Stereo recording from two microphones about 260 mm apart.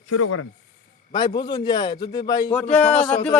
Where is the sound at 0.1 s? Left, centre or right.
Left.